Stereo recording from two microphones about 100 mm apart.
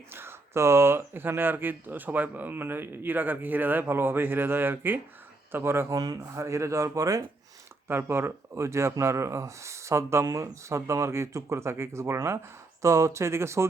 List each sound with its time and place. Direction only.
0.1 s speech: 25° right (ahead or behind)
7.9 s speech: 25° right (ahead or behind)